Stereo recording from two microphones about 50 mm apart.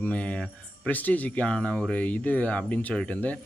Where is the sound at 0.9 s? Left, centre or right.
Left.